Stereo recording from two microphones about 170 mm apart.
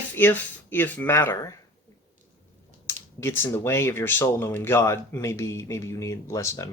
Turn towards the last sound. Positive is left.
turn(degrees=20)  # may be behind; listen again after turning